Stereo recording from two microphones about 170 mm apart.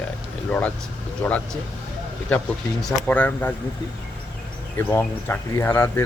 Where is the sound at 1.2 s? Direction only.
10° left (ahead or behind).